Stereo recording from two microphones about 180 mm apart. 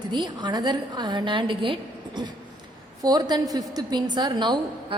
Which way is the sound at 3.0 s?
20° right (ahead or behind).